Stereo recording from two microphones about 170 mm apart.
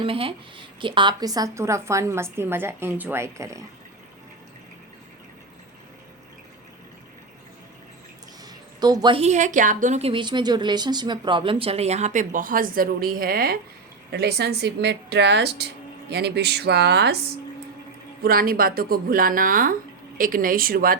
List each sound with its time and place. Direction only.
0.0 s a woman's voice: 30° right (ahead or behind)
8.8 s speech: 25° right (ahead or behind); by 13.6 s 60° right (ahead or behind)
14.1 s speech: 75° right (ahead or behind)
18.2 s speech: 60° right (ahead or behind)